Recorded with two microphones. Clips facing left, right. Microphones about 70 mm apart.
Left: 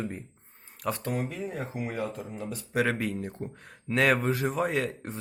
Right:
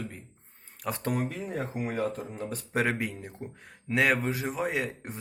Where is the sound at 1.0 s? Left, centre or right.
Right.